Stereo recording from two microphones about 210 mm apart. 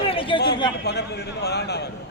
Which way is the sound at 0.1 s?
25° left (ahead or behind).